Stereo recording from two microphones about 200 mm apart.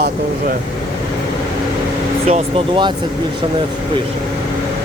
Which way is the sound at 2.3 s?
25° right (ahead or behind).